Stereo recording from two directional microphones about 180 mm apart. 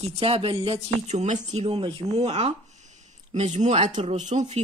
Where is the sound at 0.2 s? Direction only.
30° right (ahead or behind).